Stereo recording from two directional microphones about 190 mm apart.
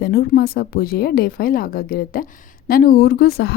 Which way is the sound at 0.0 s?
55° left (ahead or behind).